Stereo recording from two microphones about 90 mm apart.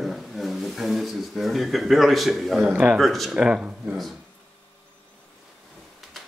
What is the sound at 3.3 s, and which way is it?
Speech, 10° right (ahead or behind).